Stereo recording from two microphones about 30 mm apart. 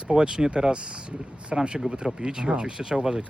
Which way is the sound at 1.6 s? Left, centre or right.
Right.